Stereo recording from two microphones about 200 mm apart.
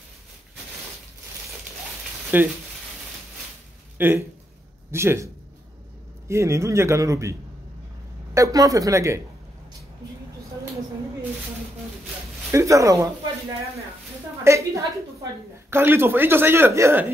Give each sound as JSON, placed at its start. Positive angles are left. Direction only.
{"t": 2.3, "sound": "speech", "side_deg": -10}
{"t": 4.0, "sound": "speech", "side_deg": -10}
{"t": 8.4, "sound": "speech", "side_deg": -15}
{"t": 12.4, "sound": "speech", "side_deg": -15}
{"t": 14.4, "sound": "a woman's voice", "side_deg": -15}